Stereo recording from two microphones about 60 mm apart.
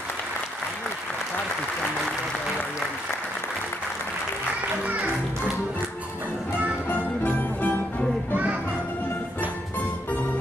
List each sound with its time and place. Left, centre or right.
4.8 s music: right
6.9 s music: left